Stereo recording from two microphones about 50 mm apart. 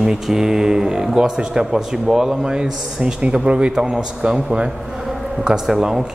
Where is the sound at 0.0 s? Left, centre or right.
Centre.